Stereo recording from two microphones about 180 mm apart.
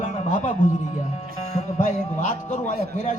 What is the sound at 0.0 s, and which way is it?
Music, 40° left (ahead or behind).